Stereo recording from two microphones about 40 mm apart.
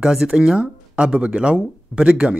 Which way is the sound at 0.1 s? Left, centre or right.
Centre.